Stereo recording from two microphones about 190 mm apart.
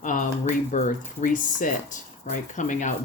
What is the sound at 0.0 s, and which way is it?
Speech, 40° left (ahead or behind).